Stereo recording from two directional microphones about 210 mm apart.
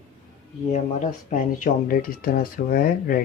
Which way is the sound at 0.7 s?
35° left (ahead or behind).